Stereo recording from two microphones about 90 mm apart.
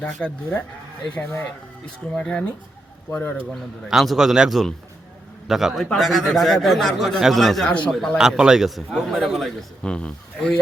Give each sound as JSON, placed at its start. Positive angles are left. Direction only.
{"t": 0.0, "sound": "speech", "side_deg": 20}
{"t": 3.5, "sound": "speech", "side_deg": 0}
{"t": 7.7, "sound": "speech", "side_deg": 15}
{"t": 8.2, "sound": "speech", "side_deg": -5}